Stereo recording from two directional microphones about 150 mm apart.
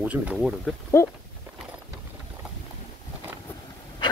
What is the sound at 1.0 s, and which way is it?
Speech, 20° left (ahead or behind).